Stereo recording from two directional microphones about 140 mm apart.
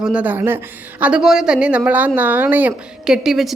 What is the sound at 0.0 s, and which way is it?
A woman's voice, 10° right (ahead or behind).